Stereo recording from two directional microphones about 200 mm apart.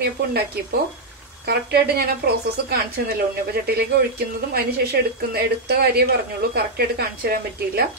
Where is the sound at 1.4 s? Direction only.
55° right (ahead or behind).